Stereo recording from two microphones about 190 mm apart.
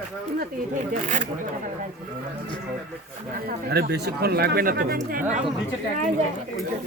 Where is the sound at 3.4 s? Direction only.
60° right (ahead or behind).